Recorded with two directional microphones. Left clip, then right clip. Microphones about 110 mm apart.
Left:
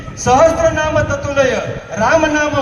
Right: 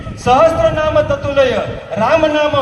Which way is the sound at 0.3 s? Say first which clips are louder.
Even; 15° right (ahead or behind).